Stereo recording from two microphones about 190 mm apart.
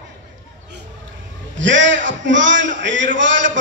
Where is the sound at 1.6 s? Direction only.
75° right (ahead or behind).